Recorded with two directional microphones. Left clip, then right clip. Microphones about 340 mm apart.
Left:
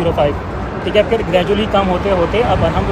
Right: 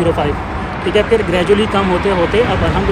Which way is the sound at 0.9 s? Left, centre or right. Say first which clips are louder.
Even; centre.